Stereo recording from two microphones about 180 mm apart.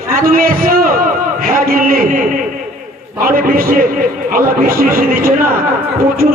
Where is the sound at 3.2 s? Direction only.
55° right (ahead or behind).